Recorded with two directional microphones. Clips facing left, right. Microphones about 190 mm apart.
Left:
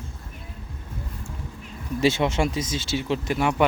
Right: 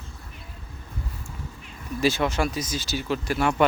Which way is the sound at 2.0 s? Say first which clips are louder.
Left 2 dB; 25° left (ahead or behind).